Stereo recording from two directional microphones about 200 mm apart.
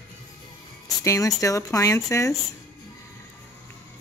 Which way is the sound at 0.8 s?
15° left (ahead or behind).